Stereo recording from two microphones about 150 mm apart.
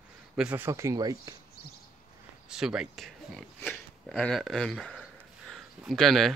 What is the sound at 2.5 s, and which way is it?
Speech, 5° right (ahead or behind).